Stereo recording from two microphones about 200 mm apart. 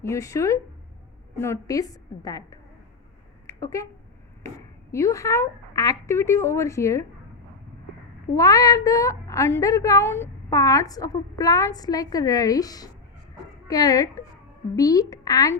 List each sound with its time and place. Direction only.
0.0 s a woman's voice: 15° left (ahead or behind)
3.4 s a sound: 15° left (ahead or behind)
4.4 s a woman's voice: 15° left (ahead or behind)
8.4 s a woman's voice: 15° left (ahead or behind)